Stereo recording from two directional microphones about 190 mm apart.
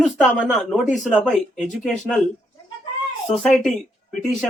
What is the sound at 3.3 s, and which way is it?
Speech, 35° left (ahead or behind).